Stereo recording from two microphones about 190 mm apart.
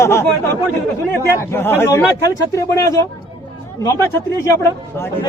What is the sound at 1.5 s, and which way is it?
Speech, 15° left (ahead or behind).